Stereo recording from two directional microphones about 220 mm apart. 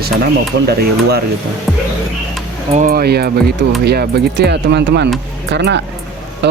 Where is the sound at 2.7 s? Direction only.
40° right (ahead or behind).